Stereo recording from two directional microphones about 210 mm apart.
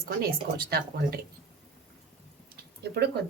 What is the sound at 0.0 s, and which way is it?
Speech, 45° right (ahead or behind).